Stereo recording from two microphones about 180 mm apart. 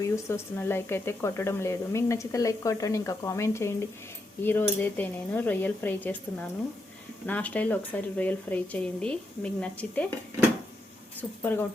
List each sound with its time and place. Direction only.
0.0 s speech: 15° left (ahead or behind)
7.3 s speech: 10° left (ahead or behind)
11.2 s speech: 10° left (ahead or behind)